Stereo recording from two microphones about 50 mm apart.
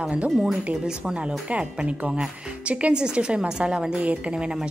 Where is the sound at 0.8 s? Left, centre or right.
Centre.